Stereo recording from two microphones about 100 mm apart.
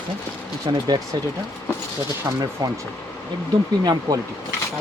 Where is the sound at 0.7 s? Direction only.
50° right (ahead or behind).